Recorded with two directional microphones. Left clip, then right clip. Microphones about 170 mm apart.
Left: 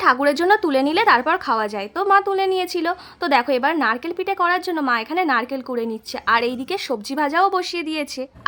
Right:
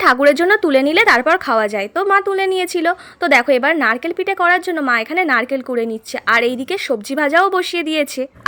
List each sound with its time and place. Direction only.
0.0 s a woman's voice: 15° right (ahead or behind)